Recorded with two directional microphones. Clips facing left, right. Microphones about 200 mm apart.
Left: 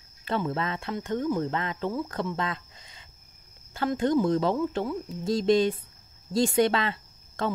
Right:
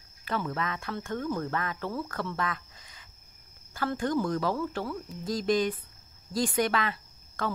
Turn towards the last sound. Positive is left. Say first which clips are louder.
# left 3 dB
turn(degrees=25)  # may be behind; listen again after turning